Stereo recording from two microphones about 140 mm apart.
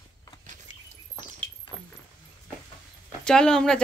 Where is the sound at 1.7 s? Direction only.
40° right (ahead or behind).